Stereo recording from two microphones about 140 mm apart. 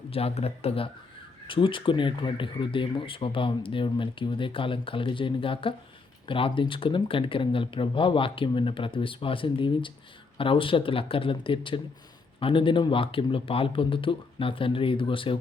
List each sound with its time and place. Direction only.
0.1 s speech: 45° left (ahead or behind)